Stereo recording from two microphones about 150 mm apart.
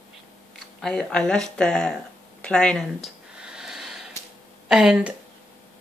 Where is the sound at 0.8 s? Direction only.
5° left (ahead or behind).